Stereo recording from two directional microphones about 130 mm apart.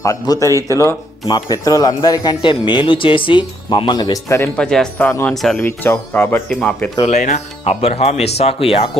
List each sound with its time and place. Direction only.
0.0 s speech: 25° left (ahead or behind)
4.5 s speech: 5° left (ahead or behind)
5.5 s speech: 15° left (ahead or behind)
7.0 s speech: 65° left (ahead or behind)
7.6 s speech: 50° left (ahead or behind)